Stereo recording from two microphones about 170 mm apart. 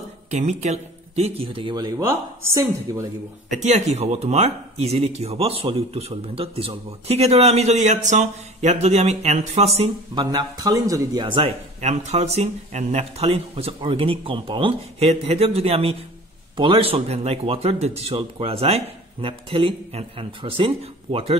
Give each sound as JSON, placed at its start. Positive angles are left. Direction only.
{"t": 0.3, "sound": "speech", "side_deg": -40}
{"t": 3.4, "sound": "speech", "side_deg": -40}
{"t": 10.3, "sound": "speech", "side_deg": -20}